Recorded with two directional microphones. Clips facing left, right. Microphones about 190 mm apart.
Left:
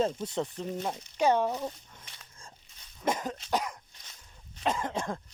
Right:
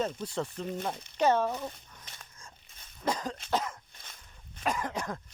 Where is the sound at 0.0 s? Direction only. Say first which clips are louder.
Left 3 dB; 20° left (ahead or behind).